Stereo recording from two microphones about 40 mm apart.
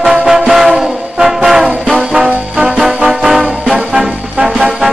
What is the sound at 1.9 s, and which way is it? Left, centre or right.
Trombone, centre.